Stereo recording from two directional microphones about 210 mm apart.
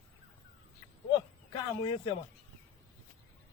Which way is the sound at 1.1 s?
20° left (ahead or behind).